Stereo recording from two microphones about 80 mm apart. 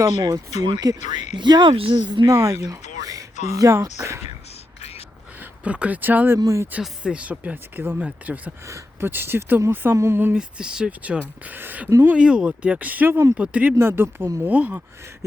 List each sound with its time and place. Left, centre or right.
0.2 s speech: right
2.2 s speech: right
5.4 s speech: centre
6.4 s speech: right
6.8 s speech: centre
8.6 s speech: right
10.3 s speech: centre
12.0 s speech: centre
13.7 s speech: right